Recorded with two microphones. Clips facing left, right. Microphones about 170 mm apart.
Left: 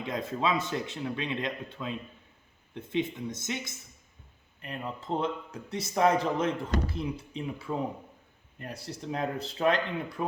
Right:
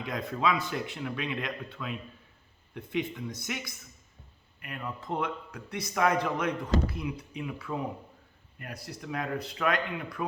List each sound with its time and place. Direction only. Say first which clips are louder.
0.0 s speech: even; 20° left (ahead or behind)